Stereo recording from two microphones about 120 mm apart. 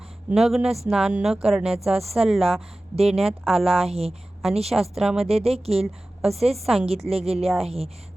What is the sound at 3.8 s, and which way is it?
Speech, 55° right (ahead or behind).